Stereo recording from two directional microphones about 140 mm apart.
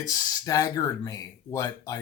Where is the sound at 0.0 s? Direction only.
25° left (ahead or behind).